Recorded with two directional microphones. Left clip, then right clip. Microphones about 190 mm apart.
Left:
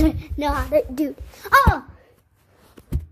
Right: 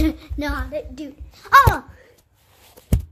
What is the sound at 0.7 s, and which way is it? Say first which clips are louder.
Speech: left 10 dB; 25° left (ahead or behind).